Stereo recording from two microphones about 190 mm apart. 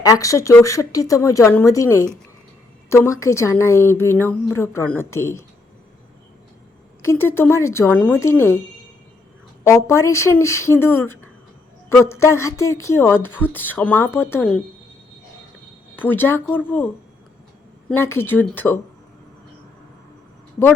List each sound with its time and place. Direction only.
0.0 s speech: 15° left (ahead or behind)
7.0 s speech: 10° left (ahead or behind)
9.6 s speech: 15° left (ahead or behind)
16.0 s speech: 10° left (ahead or behind)